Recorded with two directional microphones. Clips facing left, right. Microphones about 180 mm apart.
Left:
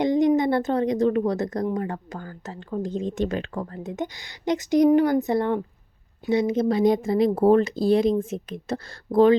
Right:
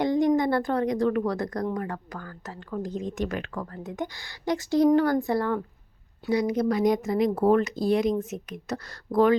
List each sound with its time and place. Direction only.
0.0 s speech: 20° left (ahead or behind)